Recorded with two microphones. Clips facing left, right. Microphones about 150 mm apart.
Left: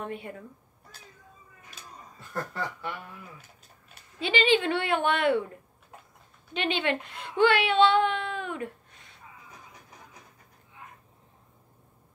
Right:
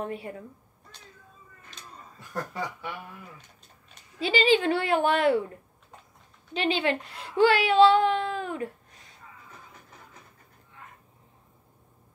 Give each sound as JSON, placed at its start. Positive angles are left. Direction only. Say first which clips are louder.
{"t": 0.0, "sound": "speech", "louder": "right 2 dB", "side_deg": -35}
{"t": 1.7, "sound": "cat", "louder": "right 1 dB", "side_deg": 5}
{"t": 2.1, "sound": "speech", "louder": "right 1 dB", "side_deg": -15}
{"t": 4.2, "sound": "speech", "louder": "right 2 dB", "side_deg": -35}
{"t": 6.5, "sound": "speech", "louder": "right 2 dB", "side_deg": -35}